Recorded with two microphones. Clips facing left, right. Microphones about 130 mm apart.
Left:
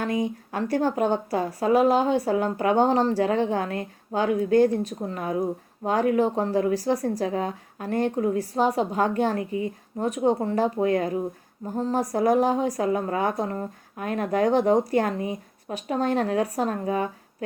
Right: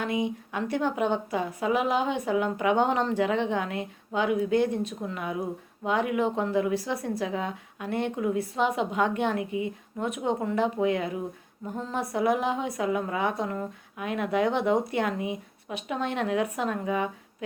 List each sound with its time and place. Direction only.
0.0 s a woman's voice: 40° left (ahead or behind)